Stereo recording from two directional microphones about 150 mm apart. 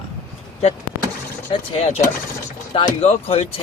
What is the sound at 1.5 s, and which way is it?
Speech, 40° left (ahead or behind).